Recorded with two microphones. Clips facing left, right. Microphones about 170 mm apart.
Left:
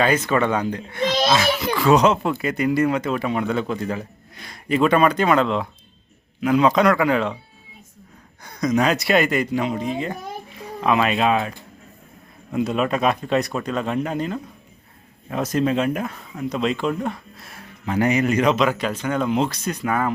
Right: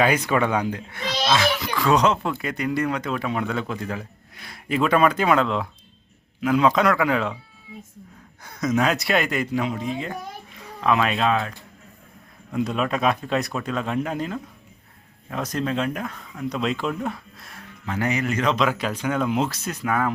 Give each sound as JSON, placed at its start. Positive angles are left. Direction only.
{"t": 0.0, "sound": "speech", "side_deg": -10}
{"t": 8.4, "sound": "speech", "side_deg": -5}
{"t": 17.8, "sound": "speech", "side_deg": 20}
{"t": 18.5, "sound": "speech", "side_deg": 0}